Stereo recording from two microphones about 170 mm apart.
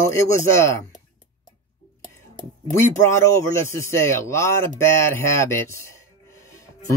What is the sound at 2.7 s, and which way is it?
Speech, 15° left (ahead or behind).